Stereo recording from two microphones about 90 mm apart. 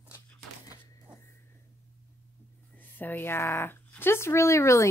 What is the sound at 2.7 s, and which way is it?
Speech, 20° left (ahead or behind).